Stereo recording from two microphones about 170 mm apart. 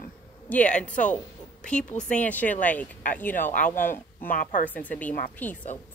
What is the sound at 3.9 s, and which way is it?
Speech, 55° left (ahead or behind).